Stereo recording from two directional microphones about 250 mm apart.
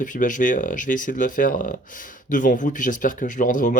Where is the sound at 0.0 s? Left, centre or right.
Left.